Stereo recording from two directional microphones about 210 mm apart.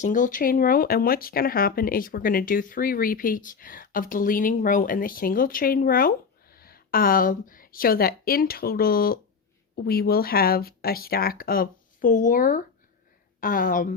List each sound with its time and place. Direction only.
0.0 s speech: 40° left (ahead or behind)